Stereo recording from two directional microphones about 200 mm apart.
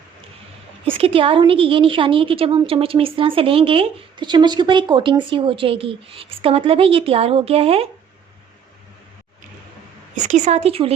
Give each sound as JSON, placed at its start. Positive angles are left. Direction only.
{"t": 0.9, "sound": "a woman's voice", "side_deg": -30}
{"t": 10.2, "sound": "a woman's voice", "side_deg": -35}